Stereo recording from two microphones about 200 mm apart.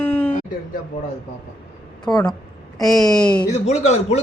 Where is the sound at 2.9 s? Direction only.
20° left (ahead or behind).